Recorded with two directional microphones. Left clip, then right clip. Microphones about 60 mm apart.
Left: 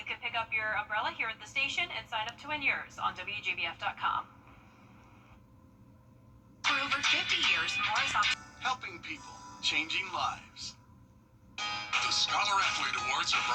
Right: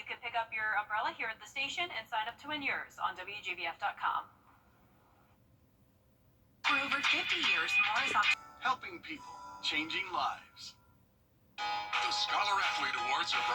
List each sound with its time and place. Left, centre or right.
0.0 s a woman's voice: right
6.6 s a woman's voice: right